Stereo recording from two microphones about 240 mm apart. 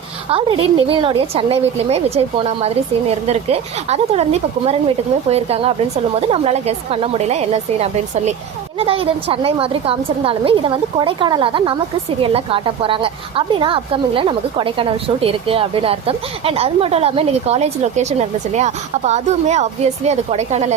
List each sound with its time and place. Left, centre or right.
0.3 s a woman's voice: right